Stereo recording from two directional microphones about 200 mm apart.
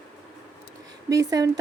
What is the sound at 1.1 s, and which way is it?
Speech, 20° right (ahead or behind).